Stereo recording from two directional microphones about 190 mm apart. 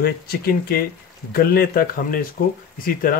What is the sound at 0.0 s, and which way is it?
Speech, 55° left (ahead or behind).